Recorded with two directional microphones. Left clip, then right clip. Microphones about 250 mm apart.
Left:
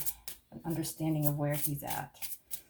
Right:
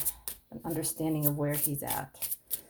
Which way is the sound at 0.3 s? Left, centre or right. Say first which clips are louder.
Right 2 dB; right.